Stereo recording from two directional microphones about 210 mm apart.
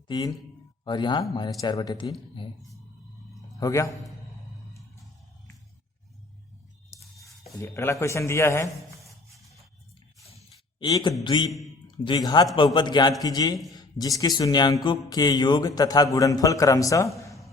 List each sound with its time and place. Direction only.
0.1 s music: 20° left (ahead or behind)
3.6 s a man's voice: 15° left (ahead or behind)
7.6 s a man's voice: 15° left (ahead or behind)
10.8 s a man's voice: 20° left (ahead or behind)
11.2 s music: 20° left (ahead or behind)
13.7 s speech: 20° left (ahead or behind)
14.8 s music: 20° left (ahead or behind)
16.1 s a man's voice: 15° left (ahead or behind)
17.2 s a sound: 15° left (ahead or behind)